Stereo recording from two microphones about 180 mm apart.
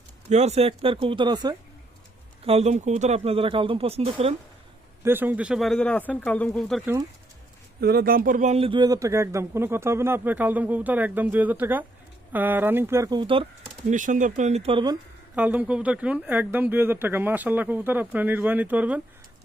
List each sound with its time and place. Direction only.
0.3 s speech: 35° right (ahead or behind)
2.4 s speech: 35° right (ahead or behind)
5.0 s speech: 10° right (ahead or behind)
7.8 s speech: 60° right (ahead or behind); by 13.5 s 30° right (ahead or behind)
13.9 s speech: 45° right (ahead or behind); by 14.9 s 30° right (ahead or behind)
15.4 s speech: 10° right (ahead or behind)